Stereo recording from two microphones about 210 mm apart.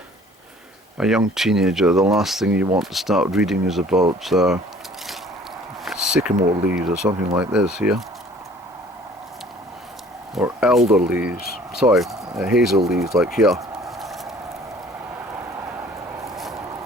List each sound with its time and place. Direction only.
0.9 s speech: centre (ahead or behind)
5.8 s speech: 5° right (ahead or behind)
10.4 s speech: centre (ahead or behind)
13.8 s horse: centre (ahead or behind)
16.3 s vehicle: centre (ahead or behind)